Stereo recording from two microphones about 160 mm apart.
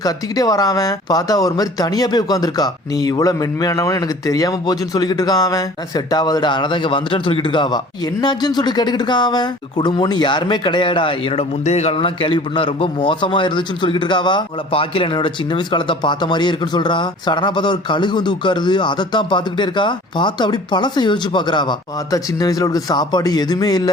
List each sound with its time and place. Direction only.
0.0 s speech: 25° left (ahead or behind)